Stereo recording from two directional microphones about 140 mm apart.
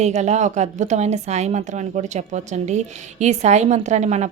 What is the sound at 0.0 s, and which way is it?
A woman's voice, 55° right (ahead or behind).